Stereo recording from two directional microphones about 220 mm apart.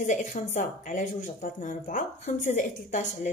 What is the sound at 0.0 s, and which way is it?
Speech, 35° left (ahead or behind).